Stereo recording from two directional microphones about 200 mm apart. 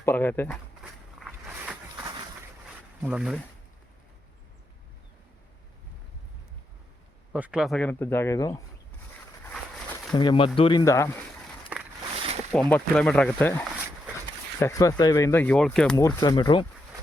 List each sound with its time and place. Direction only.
0.0 s walk: 10° left (ahead or behind); by 2.2 s 15° right (ahead or behind)
2.6 s a sound: 5° right (ahead or behind)
7.3 s speech: 5° right (ahead or behind); by 8.6 s 15° left (ahead or behind)
10.1 s speech: 25° left (ahead or behind)
11.7 s a sound: 5° right (ahead or behind)
12.5 s speech: 5° left (ahead or behind)
16.0 s speech: 20° left (ahead or behind)